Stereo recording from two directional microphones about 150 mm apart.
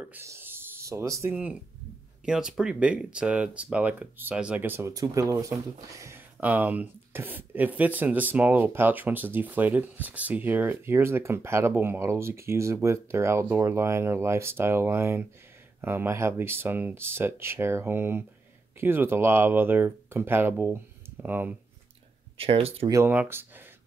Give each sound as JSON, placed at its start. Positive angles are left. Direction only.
{"t": 0.0, "sound": "a sound", "side_deg": -15}
{"t": 2.2, "sound": "speech", "side_deg": -5}
{"t": 22.4, "sound": "speech", "side_deg": -40}
{"t": 22.8, "sound": "speech", "side_deg": -15}